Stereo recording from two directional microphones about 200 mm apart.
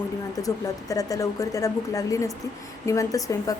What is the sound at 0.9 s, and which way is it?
A woman's voice, 15° left (ahead or behind).